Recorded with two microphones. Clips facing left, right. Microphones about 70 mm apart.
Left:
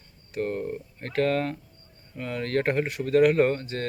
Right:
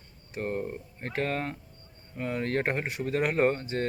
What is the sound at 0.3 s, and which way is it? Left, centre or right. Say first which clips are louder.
Speech: left 3 dB; centre.